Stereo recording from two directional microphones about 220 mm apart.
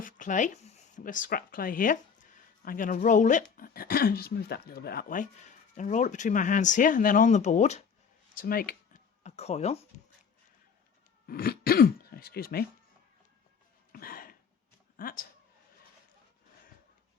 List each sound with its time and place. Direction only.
0.0 s speech: 35° left (ahead or behind)
8.4 s speech: 45° left (ahead or behind)
9.2 s speech: 30° left (ahead or behind)
11.3 s speech: 40° left (ahead or behind)
13.9 s a sound: 40° left (ahead or behind)
14.9 s speech: 40° left (ahead or behind)